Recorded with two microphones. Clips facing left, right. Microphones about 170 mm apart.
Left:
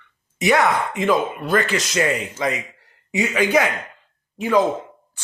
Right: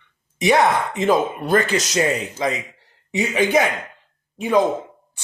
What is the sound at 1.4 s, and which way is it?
Speech, 40° right (ahead or behind).